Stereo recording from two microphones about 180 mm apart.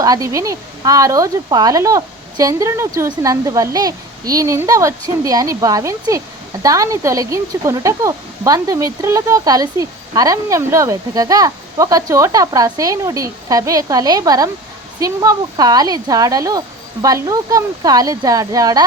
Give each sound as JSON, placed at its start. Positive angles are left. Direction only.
{"t": 0.0, "sound": "speech", "side_deg": -20}